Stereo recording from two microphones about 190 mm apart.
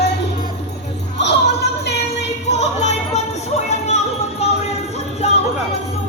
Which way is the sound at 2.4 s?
35° left (ahead or behind).